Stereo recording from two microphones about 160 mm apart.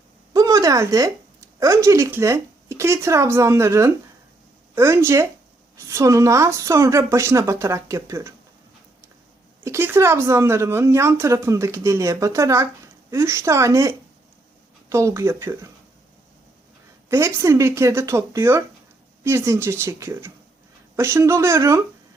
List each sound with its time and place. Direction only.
0.3 s a sound: 20° right (ahead or behind)
1.5 s speech: 20° right (ahead or behind)
9.6 s speech: 15° right (ahead or behind)
17.1 s speech: 15° right (ahead or behind)